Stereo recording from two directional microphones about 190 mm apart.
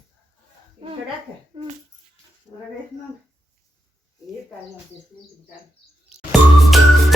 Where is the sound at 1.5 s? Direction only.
25° right (ahead or behind).